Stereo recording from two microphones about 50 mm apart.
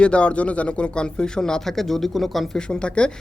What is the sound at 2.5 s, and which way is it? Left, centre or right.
Speech, centre.